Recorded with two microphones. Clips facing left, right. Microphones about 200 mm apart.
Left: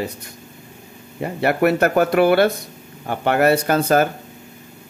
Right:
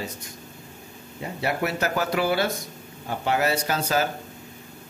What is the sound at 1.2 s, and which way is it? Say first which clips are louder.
A man's voice: left 8 dB; 60° left (ahead or behind).